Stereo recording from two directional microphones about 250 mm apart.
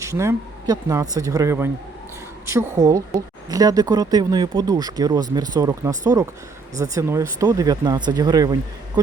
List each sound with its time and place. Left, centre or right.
0.0 s speech: centre